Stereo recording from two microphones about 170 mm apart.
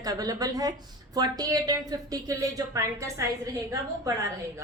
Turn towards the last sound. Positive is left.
turn(degrees=-20)  # may be behind; listen again after turning